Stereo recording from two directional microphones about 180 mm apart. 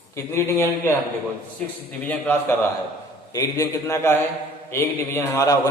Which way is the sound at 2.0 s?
10° left (ahead or behind).